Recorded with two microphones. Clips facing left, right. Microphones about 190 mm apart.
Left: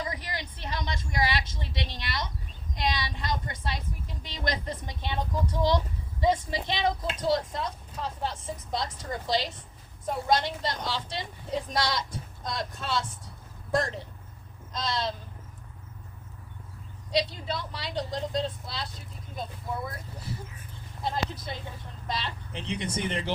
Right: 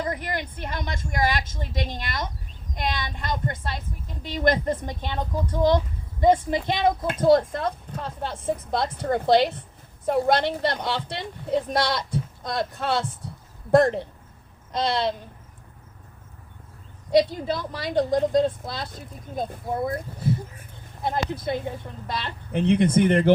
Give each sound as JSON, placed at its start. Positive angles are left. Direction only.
{"t": 0.0, "sound": "a woman's voice", "side_deg": -55}
{"t": 17.1, "sound": "a woman's voice", "side_deg": -50}
{"t": 21.0, "sound": "a woman's voice", "side_deg": -55}